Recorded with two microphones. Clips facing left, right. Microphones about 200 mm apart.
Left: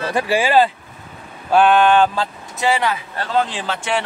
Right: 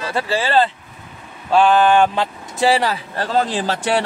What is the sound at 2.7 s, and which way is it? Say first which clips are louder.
Speech: right 1 dB; 35° right (ahead or behind).